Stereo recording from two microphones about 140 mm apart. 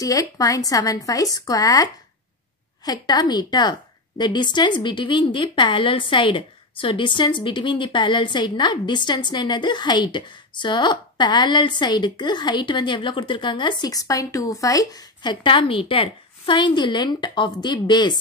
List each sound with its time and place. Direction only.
0.0 s a woman's voice: 25° left (ahead or behind)